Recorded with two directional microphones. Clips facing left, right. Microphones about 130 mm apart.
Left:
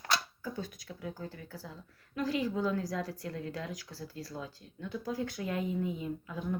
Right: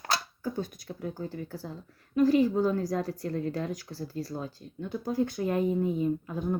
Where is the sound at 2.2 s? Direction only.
50° right (ahead or behind).